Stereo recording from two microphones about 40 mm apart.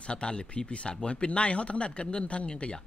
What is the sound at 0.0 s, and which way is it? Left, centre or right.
Speech, left.